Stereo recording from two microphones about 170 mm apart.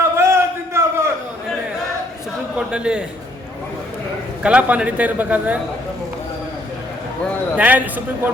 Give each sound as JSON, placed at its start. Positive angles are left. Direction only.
{"t": 0.0, "sound": "a sound", "side_deg": -15}
{"t": 2.6, "sound": "a man's voice", "side_deg": -5}
{"t": 4.4, "sound": "a man's voice", "side_deg": -5}
{"t": 7.5, "sound": "a man's voice", "side_deg": -10}